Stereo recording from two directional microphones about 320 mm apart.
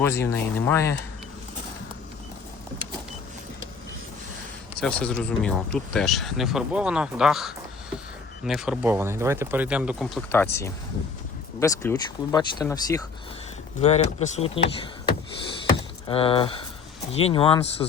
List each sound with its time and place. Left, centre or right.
0.0 s speech: centre
4.8 s speech: centre